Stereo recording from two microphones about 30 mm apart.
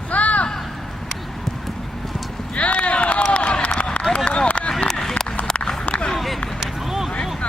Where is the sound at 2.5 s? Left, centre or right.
Left.